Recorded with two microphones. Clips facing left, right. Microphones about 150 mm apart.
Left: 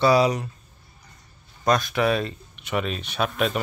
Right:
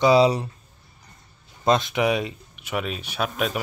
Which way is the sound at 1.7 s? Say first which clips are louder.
Right 1 dB; 20° right (ahead or behind).